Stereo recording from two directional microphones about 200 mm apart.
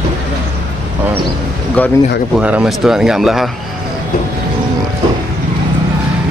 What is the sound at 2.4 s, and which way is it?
Speech, 5° right (ahead or behind).